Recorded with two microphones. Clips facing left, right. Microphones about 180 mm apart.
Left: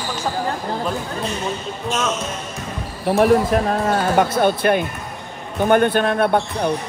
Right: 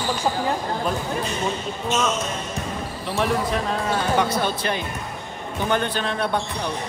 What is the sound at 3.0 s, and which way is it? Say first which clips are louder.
Speech: left 9 dB; 50° left (ahead or behind).